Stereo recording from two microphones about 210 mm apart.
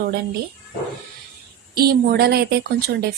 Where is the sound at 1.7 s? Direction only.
45° right (ahead or behind).